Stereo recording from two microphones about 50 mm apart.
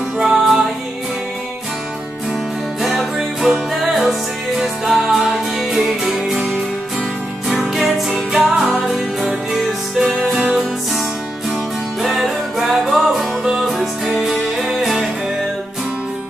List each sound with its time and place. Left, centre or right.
0.2 s music: centre
2.8 s music: centre
8.3 s music: centre
12.1 s music: centre